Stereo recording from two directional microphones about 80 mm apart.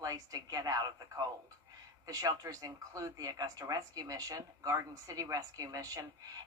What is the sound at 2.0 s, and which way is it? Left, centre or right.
Speech, right.